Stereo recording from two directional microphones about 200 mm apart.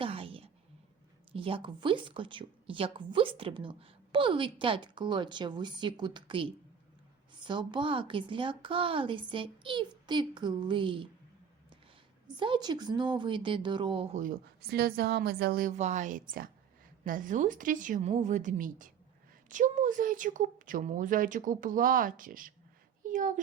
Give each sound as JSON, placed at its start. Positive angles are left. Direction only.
{"t": 0.0, "sound": "a sound", "side_deg": -25}
{"t": 1.3, "sound": "speech", "side_deg": -25}
{"t": 12.4, "sound": "speech", "side_deg": -20}
{"t": 14.7, "sound": "speech", "side_deg": -50}
{"t": 15.8, "sound": "a woman's voice", "side_deg": -35}